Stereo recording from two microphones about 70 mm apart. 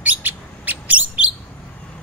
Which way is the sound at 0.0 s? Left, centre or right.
Right.